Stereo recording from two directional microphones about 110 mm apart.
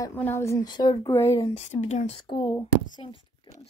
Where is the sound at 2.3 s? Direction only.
55° left (ahead or behind).